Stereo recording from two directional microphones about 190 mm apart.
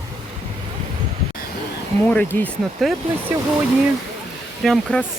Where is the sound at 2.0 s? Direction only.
10° left (ahead or behind).